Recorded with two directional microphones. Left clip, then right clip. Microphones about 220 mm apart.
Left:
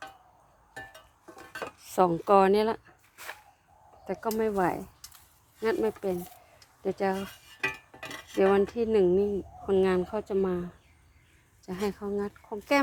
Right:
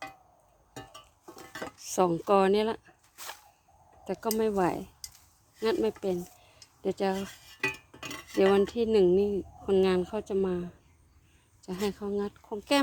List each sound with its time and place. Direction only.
1.5 s zipper: 15° right (ahead or behind)
4.0 s speech: 15° right (ahead or behind)
8.3 s speech: 15° right (ahead or behind)